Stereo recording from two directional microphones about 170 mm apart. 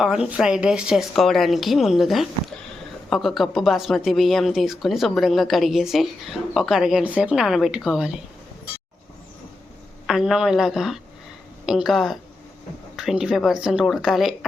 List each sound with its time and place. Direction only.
0.0 s speech: 5° right (ahead or behind)
10.1 s speech: centre (ahead or behind)